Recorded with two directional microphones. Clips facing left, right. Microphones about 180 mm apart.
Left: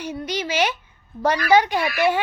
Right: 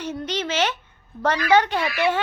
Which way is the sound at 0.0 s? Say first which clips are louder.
Even; 10° left (ahead or behind).